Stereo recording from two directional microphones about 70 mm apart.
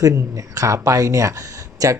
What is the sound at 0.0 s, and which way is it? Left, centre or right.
Speech, right.